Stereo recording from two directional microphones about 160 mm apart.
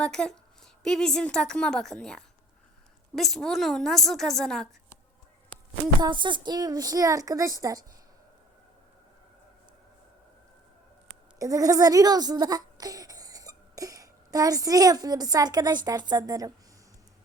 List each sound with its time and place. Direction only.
0.0 s a woman's voice: 5° left (ahead or behind)
6.0 s a woman's voice: 30° right (ahead or behind)
11.3 s a child's voice: 20° right (ahead or behind)